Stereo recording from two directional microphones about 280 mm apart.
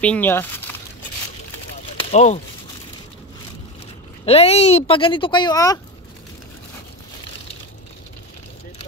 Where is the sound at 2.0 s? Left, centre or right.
Left.